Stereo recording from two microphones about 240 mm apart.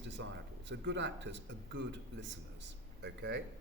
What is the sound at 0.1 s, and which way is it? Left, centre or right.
Speech, right.